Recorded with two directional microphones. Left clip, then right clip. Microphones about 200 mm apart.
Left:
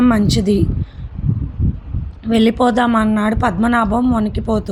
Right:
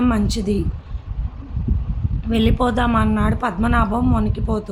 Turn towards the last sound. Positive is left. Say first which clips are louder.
# left 5 dB
turn(degrees=25)  # may be behind; listen again after turning